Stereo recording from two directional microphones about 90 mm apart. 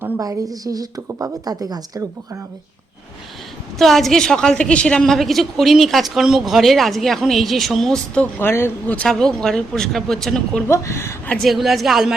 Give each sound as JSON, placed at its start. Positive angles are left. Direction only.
{"t": 0.2, "sound": "a woman's voice", "side_deg": -45}
{"t": 3.8, "sound": "a woman's voice", "side_deg": 0}
{"t": 8.4, "sound": "speech", "side_deg": 25}
{"t": 9.0, "sound": "a woman's voice", "side_deg": 5}
{"t": 10.7, "sound": "speech", "side_deg": 30}
{"t": 11.3, "sound": "a woman's voice", "side_deg": 0}